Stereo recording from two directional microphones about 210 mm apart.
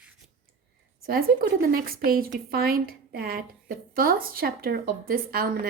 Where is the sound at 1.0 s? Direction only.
45° right (ahead or behind).